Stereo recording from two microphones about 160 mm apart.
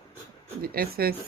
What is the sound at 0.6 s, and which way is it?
Speech, 70° right (ahead or behind).